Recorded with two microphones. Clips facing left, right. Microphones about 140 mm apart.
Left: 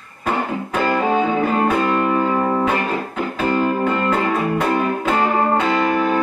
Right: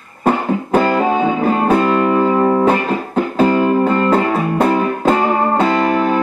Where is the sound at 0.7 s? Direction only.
40° right (ahead or behind).